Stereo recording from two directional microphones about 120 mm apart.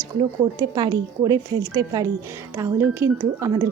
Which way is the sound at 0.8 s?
35° right (ahead or behind).